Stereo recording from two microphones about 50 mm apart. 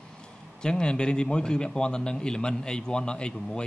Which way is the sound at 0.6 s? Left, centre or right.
Centre.